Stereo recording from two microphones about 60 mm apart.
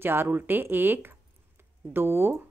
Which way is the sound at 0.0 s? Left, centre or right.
Right.